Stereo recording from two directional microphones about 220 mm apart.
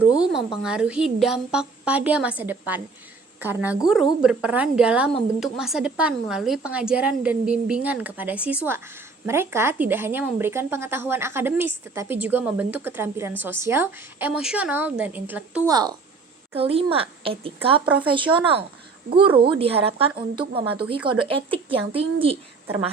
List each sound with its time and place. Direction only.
0.0 s a woman's voice: 5° right (ahead or behind)
15.7 s a woman's voice: 20° right (ahead or behind)